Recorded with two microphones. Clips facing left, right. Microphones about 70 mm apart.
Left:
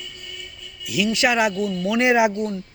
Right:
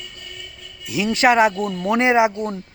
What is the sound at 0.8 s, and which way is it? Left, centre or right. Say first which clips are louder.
Speech: right 3 dB; right.